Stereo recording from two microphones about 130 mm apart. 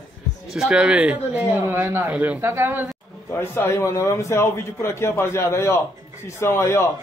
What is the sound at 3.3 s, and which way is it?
A man's voice, 20° left (ahead or behind).